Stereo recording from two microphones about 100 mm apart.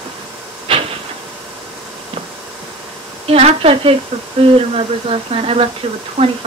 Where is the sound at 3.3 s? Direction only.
85° right.